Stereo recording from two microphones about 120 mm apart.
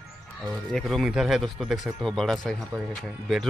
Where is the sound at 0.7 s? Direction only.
Centre (ahead or behind).